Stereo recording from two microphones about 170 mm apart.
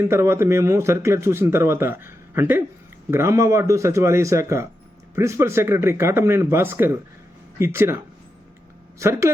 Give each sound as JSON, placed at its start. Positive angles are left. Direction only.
{"t": 0.0, "sound": "speech", "side_deg": -15}